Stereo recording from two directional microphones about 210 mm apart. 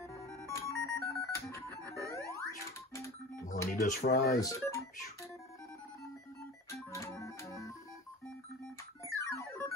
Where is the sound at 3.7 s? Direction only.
40° left (ahead or behind).